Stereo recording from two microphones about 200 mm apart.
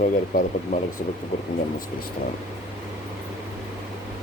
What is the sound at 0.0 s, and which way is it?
Speech, 40° left (ahead or behind).